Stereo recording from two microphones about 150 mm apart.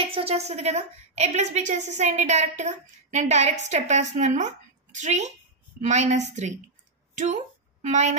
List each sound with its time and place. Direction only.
0.0 s a woman's voice: 40° right (ahead or behind)
7.8 s a woman's voice: 50° right (ahead or behind)